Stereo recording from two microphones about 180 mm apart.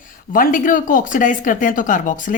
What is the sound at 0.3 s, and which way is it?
A woman's voice, 50° left (ahead or behind).